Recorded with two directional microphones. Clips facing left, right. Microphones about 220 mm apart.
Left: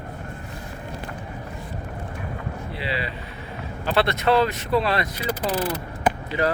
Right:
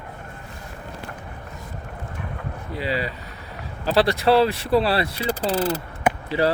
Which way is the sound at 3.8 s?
35° right (ahead or behind).